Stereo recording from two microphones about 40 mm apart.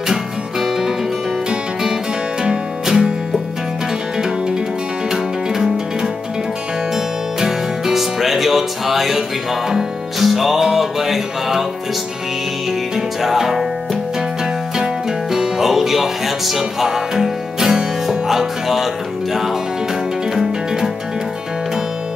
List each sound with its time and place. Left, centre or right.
0.1 s music: centre
2.4 s music: centre
5.1 s music: centre
7.3 s music: centre
12.9 s music: centre
15.3 s music: centre